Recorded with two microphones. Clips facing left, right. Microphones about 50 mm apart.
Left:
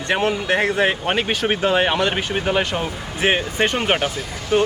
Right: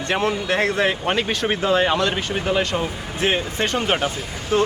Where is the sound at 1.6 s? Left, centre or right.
Left.